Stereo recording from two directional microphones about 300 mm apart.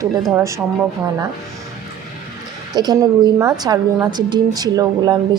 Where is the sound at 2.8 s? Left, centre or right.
Centre.